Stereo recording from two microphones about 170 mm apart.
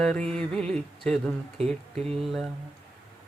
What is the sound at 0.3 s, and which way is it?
Speech, 5° left (ahead or behind).